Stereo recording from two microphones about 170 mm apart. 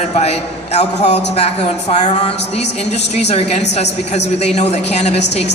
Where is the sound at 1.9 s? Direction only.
45° left (ahead or behind).